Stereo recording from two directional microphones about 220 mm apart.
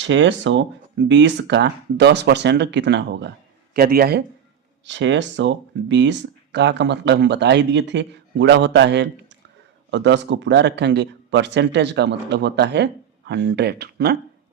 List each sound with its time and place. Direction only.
0.0 s speech: 55° right (ahead or behind)
4.9 s speech: 55° right (ahead or behind)